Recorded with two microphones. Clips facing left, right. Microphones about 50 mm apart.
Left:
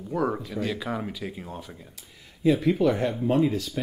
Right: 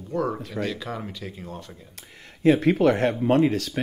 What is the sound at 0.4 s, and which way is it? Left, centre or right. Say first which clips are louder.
Speech: right 1 dB; right.